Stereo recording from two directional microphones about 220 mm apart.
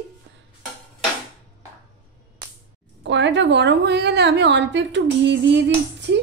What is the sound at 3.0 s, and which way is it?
A woman's voice, 55° right (ahead or behind).